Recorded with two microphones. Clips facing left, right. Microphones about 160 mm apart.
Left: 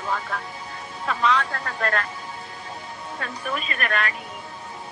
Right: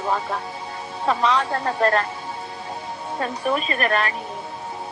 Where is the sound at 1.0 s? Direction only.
30° right (ahead or behind).